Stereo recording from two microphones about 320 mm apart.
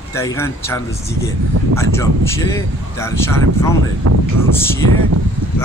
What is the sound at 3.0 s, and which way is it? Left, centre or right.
Speech, centre.